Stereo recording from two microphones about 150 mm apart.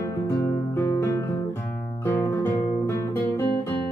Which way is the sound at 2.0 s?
15° left (ahead or behind).